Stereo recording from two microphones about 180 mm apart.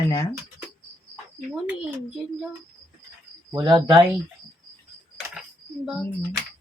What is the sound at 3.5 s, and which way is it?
Speech, 25° right (ahead or behind).